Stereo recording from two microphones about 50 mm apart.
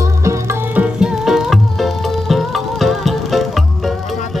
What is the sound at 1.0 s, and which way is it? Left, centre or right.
Music, centre.